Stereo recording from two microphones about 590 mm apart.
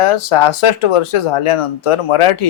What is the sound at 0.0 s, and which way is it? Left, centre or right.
Speech, left.